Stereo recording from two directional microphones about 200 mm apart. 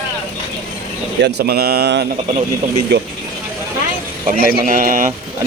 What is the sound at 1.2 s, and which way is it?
Speech, 60° right (ahead or behind).